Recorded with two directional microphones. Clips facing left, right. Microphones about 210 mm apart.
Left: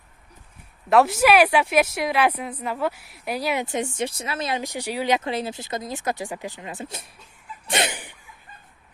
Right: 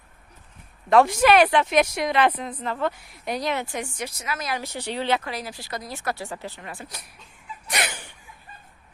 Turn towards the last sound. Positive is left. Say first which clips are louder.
# left 4 dB
turn(degrees=25)  # may be behind; listen again after turning